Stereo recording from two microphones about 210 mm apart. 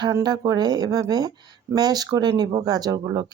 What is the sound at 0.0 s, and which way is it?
Speech, 20° right (ahead or behind).